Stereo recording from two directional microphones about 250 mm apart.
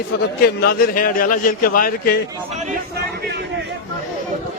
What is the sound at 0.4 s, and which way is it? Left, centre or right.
A man's voice, left.